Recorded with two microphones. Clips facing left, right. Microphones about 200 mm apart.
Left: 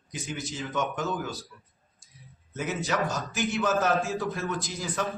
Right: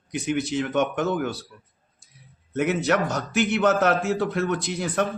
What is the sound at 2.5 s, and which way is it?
A man's voice, 65° right (ahead or behind).